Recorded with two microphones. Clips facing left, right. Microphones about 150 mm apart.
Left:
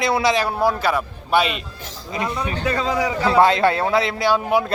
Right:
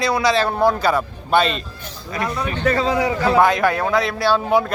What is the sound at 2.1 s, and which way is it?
A man's voice, 20° left (ahead or behind).